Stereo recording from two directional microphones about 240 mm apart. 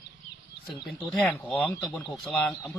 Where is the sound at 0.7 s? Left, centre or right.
Centre.